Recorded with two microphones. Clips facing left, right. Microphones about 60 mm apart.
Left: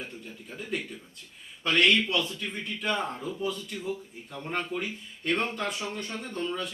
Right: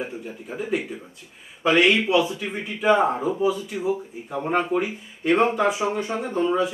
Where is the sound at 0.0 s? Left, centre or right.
Centre.